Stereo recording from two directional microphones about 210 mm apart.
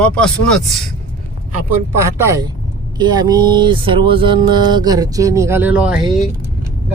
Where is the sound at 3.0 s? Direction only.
20° right (ahead or behind).